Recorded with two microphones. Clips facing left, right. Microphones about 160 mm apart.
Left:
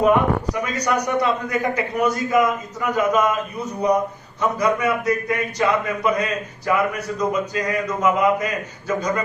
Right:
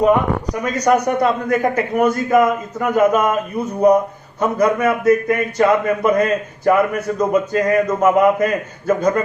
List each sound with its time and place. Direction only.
0.6 s a man's voice: 50° right (ahead or behind)